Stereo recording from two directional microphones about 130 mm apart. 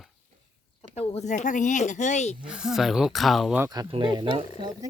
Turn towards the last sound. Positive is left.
turn(degrees=-30)  # may be behind; listen again after turning